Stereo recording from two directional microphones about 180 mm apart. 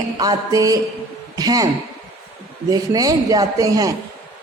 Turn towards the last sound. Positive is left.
turn(degrees=-20)  # may be behind; listen again after turning